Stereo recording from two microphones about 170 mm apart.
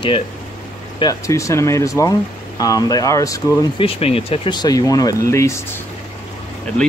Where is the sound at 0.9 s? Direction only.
20° left (ahead or behind).